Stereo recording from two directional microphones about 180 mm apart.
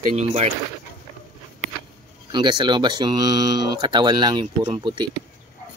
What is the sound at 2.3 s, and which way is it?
Speech, 25° right (ahead or behind).